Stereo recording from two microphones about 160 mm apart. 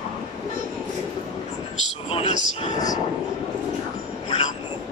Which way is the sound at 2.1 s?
40° left (ahead or behind).